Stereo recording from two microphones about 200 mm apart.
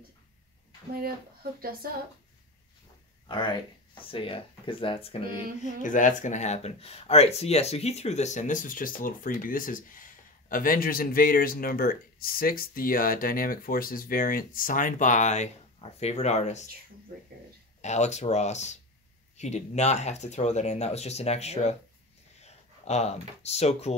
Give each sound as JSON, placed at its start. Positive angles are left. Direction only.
{"t": 1.6, "sound": "speech", "side_deg": -50}
{"t": 3.3, "sound": "speech", "side_deg": 25}
{"t": 5.8, "sound": "speech", "side_deg": 40}
{"t": 17.8, "sound": "speech", "side_deg": 35}